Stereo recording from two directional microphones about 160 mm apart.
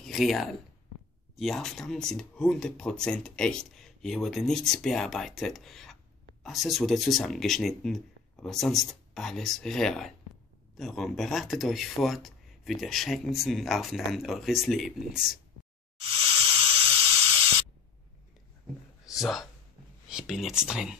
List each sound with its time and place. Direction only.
0.0 s speech: centre (ahead or behind)
16.0 s hiss: 35° right (ahead or behind)
19.0 s a sound: centre (ahead or behind)
20.1 s speech: 5° right (ahead or behind)